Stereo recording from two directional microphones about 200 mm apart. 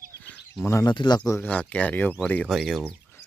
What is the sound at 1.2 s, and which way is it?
Speech, 10° left (ahead or behind).